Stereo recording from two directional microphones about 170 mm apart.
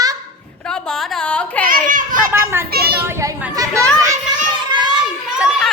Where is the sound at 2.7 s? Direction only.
65° right (ahead or behind).